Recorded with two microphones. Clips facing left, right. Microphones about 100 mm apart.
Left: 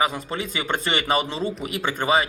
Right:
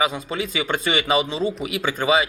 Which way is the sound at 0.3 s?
45° left (ahead or behind).